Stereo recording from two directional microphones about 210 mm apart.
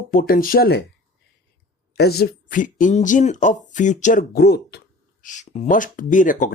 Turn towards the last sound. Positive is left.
turn(degrees=40)  # may be behind; listen again after turning